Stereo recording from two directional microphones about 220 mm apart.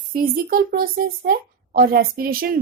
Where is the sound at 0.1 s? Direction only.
40° right (ahead or behind).